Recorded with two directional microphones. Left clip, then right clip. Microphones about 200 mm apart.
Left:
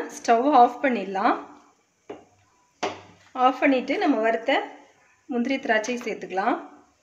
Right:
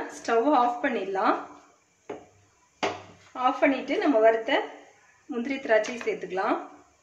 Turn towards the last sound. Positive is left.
turn(degrees=50)  # may be behind; listen again after turning